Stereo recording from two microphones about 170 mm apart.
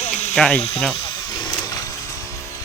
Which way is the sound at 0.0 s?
40° left (ahead or behind).